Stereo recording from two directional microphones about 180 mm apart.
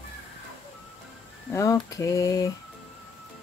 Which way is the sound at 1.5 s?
20° left (ahead or behind).